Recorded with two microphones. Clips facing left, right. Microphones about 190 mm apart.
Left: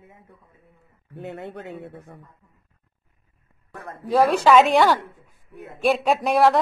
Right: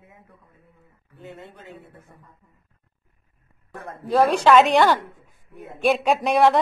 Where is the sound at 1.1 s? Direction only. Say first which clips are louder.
Left 7 dB; 65° left (ahead or behind).